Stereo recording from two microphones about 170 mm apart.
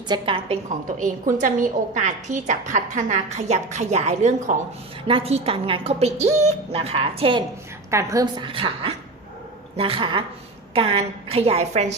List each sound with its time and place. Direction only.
0.1 s a woman's voice: 35° right (ahead or behind)
0.9 s a woman's voice: 50° right (ahead or behind); by 7.4 s 30° right (ahead or behind)
7.9 s a woman's voice: 15° right (ahead or behind); by 11.9 s 40° right (ahead or behind)